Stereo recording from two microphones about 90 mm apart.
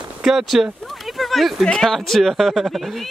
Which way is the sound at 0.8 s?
Centre (ahead or behind).